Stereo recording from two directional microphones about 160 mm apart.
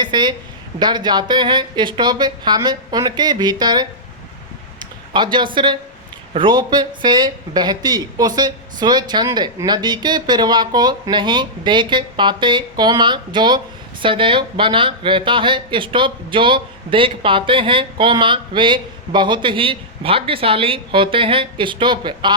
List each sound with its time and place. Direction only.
0.0 s speech: 30° right (ahead or behind)
5.1 s speech: 30° right (ahead or behind)